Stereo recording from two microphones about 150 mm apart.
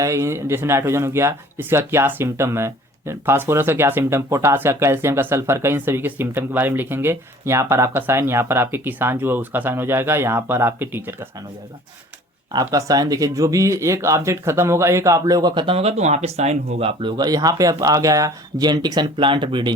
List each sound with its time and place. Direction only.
0.0 s speech: 20° right (ahead or behind)
12.5 s speech: 25° right (ahead or behind); by 16.9 s 45° right (ahead or behind)
17.0 s speech: 30° right (ahead or behind)